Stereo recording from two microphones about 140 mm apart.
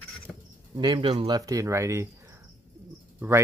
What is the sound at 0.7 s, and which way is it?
Speech, 30° right (ahead or behind).